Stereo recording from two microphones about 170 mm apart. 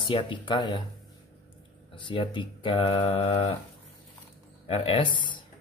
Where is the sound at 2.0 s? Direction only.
30° left (ahead or behind).